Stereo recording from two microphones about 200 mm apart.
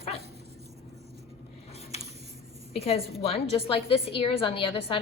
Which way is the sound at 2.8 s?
30° left (ahead or behind).